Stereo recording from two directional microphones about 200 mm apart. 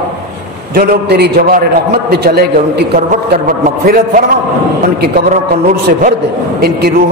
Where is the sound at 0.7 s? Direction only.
55° right (ahead or behind).